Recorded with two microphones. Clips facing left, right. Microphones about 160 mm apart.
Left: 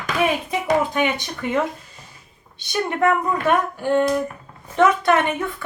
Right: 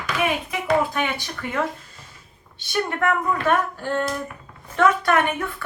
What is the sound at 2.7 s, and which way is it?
A woman's voice, 20° left (ahead or behind).